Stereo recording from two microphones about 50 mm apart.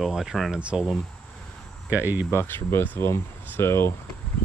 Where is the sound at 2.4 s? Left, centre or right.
Left.